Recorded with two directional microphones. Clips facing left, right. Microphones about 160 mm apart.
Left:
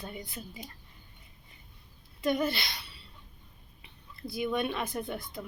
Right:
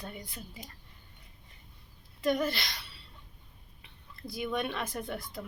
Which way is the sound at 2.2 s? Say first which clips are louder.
Even; 5° left (ahead or behind).